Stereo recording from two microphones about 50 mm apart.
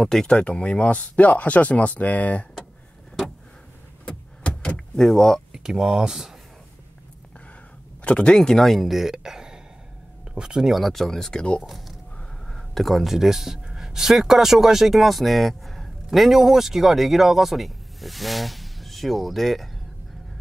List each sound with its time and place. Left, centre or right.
0.0 s speech: centre
0.4 s speech: left
4.0 s vehicle: left
5.5 s speech: centre
8.0 s speech: left; by 10.7 s centre
10.7 s speech: centre
11.6 s a sound: centre
12.4 s speech: centre